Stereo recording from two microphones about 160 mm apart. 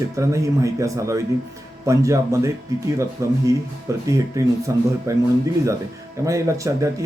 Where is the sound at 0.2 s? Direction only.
20° right (ahead or behind).